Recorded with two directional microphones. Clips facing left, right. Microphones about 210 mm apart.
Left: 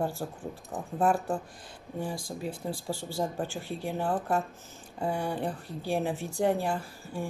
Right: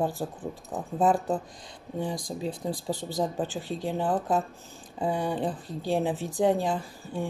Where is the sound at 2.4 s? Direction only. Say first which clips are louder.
Right 3 dB; 20° right (ahead or behind).